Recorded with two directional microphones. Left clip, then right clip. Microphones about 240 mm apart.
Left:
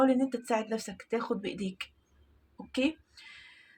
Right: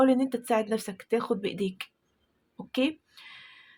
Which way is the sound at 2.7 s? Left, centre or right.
Right.